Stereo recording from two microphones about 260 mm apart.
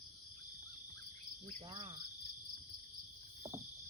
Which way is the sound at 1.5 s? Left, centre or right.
Right.